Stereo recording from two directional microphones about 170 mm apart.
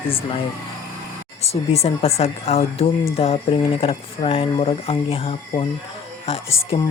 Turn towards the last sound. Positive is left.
turn(degrees=35)  # may be behind; listen again after turning